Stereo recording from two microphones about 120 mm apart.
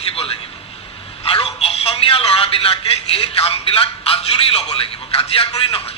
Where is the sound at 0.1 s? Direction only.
55° left (ahead or behind).